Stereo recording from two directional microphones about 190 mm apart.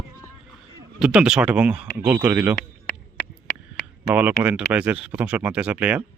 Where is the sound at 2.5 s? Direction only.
60° left (ahead or behind).